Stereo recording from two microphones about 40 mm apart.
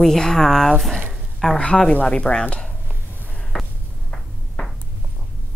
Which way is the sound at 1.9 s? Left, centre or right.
Left.